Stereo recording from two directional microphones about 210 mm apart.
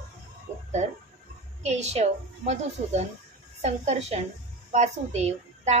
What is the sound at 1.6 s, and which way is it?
A woman's voice, 30° right (ahead or behind).